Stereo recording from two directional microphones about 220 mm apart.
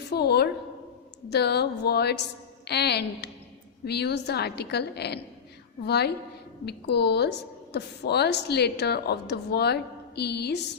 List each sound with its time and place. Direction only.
0.1 s a woman's voice: 45° left (ahead or behind)